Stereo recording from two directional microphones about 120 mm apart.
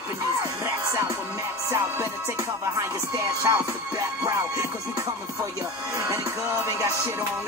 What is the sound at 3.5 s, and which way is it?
Music, 30° right (ahead or behind).